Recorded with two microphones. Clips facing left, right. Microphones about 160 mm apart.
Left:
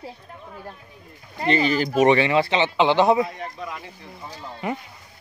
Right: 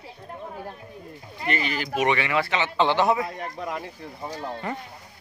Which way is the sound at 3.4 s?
45° right (ahead or behind).